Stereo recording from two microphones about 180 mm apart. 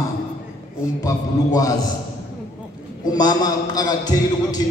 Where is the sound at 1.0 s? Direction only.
20° left (ahead or behind).